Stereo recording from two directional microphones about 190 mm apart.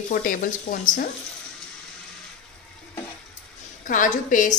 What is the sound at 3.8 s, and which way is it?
Speech, 45° left (ahead or behind).